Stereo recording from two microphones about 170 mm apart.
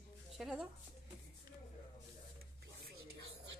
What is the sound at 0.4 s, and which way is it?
Speech, 5° right (ahead or behind).